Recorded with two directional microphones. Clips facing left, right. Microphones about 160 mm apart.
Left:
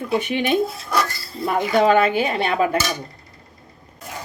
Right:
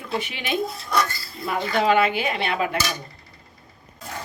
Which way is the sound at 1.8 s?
45° left (ahead or behind).